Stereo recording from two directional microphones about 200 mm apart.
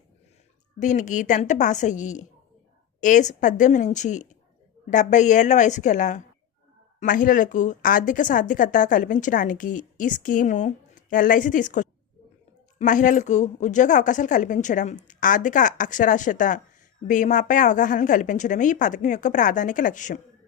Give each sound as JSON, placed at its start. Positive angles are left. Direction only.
{"t": 0.8, "sound": "speech", "side_deg": 40}